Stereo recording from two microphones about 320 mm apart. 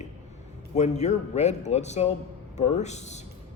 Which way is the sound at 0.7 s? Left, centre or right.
Left.